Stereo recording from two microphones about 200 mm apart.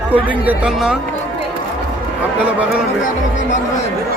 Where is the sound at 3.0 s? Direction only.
40° left (ahead or behind).